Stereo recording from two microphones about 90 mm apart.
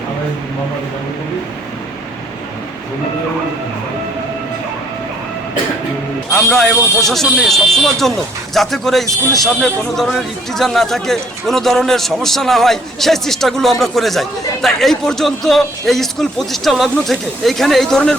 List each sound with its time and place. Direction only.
6.3 s a man's voice: 5° left (ahead or behind)